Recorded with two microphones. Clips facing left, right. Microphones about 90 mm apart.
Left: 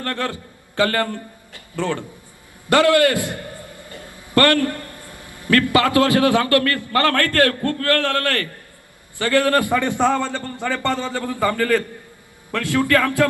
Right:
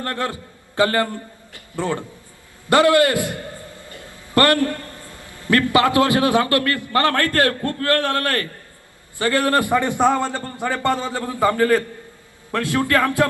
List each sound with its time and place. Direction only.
0.0 s a man's voice: 25° right (ahead or behind)
4.4 s a man's voice: 25° right (ahead or behind)
4.7 s a sound: 15° left (ahead or behind)
5.7 s a man's voice: 25° right (ahead or behind)